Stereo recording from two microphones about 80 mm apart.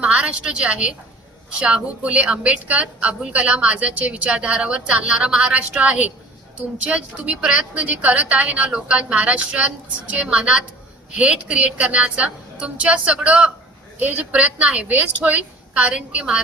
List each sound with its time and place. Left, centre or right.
0.0 s a woman's voice: centre